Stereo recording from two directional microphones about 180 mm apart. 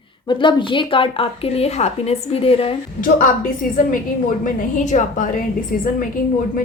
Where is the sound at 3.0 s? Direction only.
50° left (ahead or behind).